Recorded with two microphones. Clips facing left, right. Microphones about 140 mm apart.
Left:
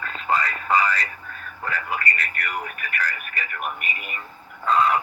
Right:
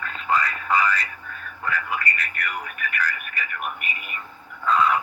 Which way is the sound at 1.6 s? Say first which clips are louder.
Even; 35° left (ahead or behind).